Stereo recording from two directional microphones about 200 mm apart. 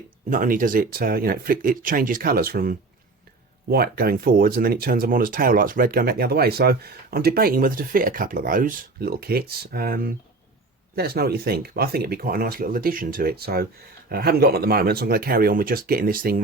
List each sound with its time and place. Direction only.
0.3 s speech: 45° right (ahead or behind)